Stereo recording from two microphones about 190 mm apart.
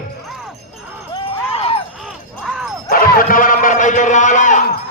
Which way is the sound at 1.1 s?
30° left (ahead or behind).